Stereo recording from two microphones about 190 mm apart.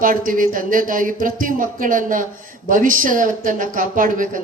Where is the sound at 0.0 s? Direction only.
45° right (ahead or behind).